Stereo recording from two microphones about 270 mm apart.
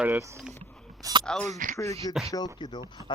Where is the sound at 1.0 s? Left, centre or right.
Centre.